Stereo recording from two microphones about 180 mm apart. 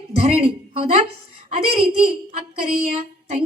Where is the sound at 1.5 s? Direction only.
30° right (ahead or behind).